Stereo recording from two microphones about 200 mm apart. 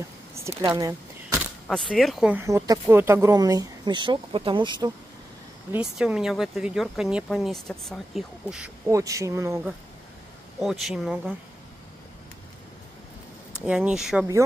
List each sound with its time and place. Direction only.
0.6 s a sound: 15° right (ahead or behind)
1.7 s speech: 5° left (ahead or behind)
2.4 s speech: 15° right (ahead or behind)
5.7 s speech: 5° right (ahead or behind)
10.6 s speech: centre (ahead or behind)
13.7 s speech: 5° right (ahead or behind)